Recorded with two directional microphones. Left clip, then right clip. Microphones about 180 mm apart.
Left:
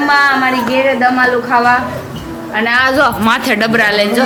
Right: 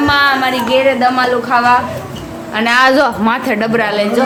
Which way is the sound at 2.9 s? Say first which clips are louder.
Left 1 dB; 20° right (ahead or behind).